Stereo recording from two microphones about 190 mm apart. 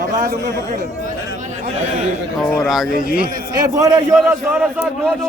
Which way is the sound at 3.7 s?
15° right (ahead or behind).